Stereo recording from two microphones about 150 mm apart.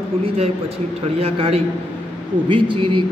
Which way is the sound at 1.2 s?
40° right (ahead or behind).